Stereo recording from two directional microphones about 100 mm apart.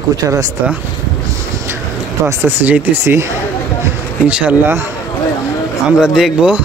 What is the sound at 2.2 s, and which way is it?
Speech, 20° right (ahead or behind).